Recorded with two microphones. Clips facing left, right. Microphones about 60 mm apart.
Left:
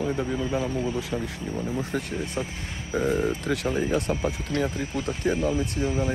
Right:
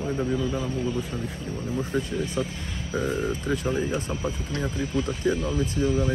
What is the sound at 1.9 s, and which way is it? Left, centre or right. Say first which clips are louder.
Speech: right 5 dB; left.